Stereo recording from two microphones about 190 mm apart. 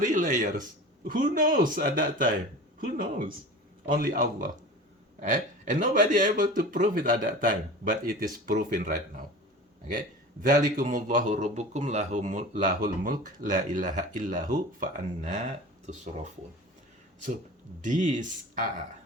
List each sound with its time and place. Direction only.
0.0 s speech: 40° right (ahead or behind)
10.4 s speech: 45° right (ahead or behind)
17.8 s speech: 40° right (ahead or behind)